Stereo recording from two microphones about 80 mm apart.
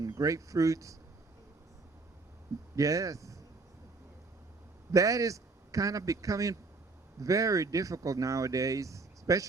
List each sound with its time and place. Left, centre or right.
0.0 s speech: right
2.7 s speech: right
4.9 s a man's voice: right